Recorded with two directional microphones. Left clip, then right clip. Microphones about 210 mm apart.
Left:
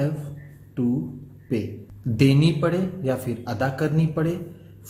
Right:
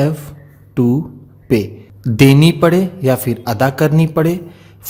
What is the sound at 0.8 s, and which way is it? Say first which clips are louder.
A man's voice: right 10 dB; 55° right (ahead or behind).